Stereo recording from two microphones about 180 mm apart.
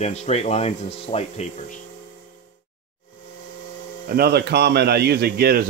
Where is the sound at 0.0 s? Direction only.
35° left (ahead or behind).